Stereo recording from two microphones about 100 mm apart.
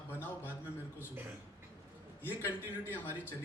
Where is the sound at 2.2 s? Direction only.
20° left (ahead or behind).